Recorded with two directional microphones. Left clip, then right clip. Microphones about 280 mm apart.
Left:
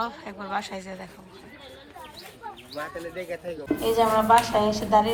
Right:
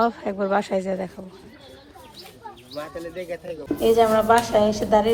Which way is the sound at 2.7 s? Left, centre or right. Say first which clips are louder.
Right 2 dB; left.